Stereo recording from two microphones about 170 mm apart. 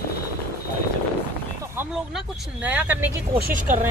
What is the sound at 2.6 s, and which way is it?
Speech, 10° right (ahead or behind).